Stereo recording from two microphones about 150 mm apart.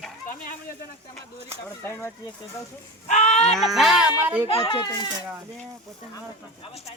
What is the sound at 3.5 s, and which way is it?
Speech, centre (ahead or behind).